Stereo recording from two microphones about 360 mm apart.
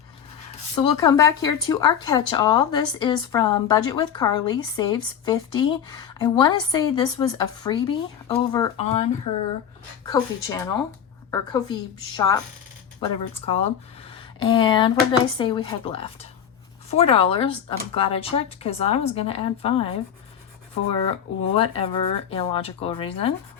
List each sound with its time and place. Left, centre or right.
0.9 s speech: centre
10.1 s speech: centre
21.1 s speech: centre